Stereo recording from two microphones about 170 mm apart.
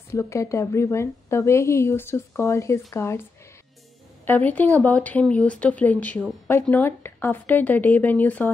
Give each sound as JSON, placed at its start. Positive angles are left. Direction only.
{"t": 0.1, "sound": "a woman's voice", "side_deg": 15}
{"t": 4.3, "sound": "a woman's voice", "side_deg": 10}